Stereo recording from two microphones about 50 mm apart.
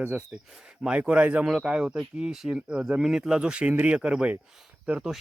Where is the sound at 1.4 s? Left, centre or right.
Centre.